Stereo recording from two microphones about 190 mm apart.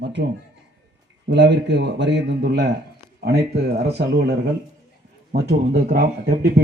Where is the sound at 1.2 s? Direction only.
65° right (ahead or behind).